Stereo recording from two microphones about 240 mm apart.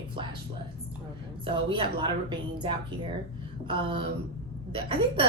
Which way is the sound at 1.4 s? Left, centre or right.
Right.